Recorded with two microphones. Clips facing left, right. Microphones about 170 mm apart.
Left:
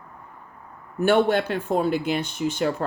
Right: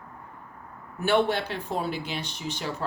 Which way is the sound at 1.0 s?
50° left (ahead or behind).